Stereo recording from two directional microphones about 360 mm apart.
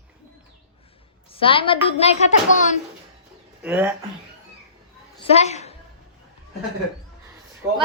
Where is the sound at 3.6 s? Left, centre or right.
Centre.